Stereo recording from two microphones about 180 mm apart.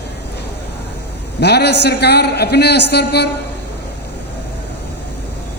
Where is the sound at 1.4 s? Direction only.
65° left (ahead or behind).